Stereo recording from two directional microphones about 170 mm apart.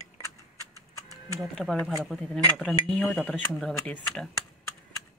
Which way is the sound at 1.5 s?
Centre (ahead or behind).